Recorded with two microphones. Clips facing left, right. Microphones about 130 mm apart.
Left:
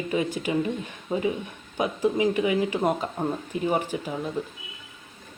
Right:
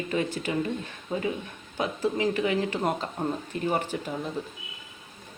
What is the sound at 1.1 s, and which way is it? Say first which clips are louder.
Speech: left 3 dB; 25° left (ahead or behind).